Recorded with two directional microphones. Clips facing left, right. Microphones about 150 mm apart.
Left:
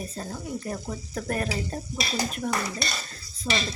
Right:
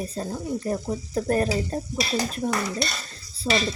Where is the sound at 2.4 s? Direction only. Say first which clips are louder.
Right 3 dB; 30° right (ahead or behind).